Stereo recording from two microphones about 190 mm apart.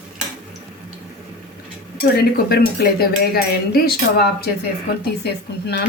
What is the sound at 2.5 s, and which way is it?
A woman's voice, 55° left (ahead or behind).